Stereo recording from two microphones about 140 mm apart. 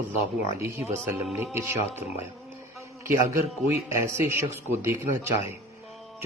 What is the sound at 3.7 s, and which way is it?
Speech, 15° right (ahead or behind).